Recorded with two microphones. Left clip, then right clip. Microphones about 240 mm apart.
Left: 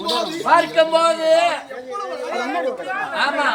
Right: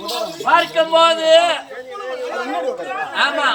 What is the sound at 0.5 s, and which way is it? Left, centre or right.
A man's voice, centre.